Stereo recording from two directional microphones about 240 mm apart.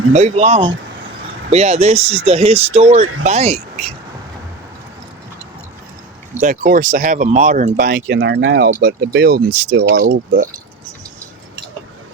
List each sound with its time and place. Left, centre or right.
0.1 s speech: right
6.4 s speech: right